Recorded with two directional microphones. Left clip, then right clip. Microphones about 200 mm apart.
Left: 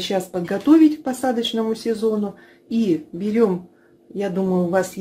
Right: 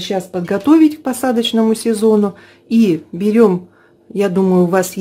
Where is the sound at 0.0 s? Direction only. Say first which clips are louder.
Right 3 dB; 20° right (ahead or behind).